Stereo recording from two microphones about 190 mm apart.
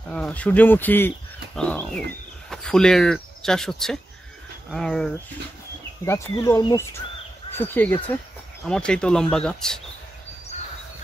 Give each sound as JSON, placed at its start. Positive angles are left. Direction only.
{"t": 0.1, "sound": "speech", "side_deg": 5}
{"t": 6.0, "sound": "speech", "side_deg": 15}